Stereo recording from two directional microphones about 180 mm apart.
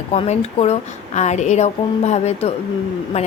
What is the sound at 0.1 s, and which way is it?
A woman's voice, 35° left (ahead or behind).